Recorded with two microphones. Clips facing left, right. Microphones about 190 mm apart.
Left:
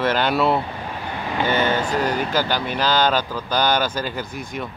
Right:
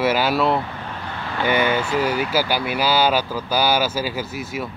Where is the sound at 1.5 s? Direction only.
10° right (ahead or behind).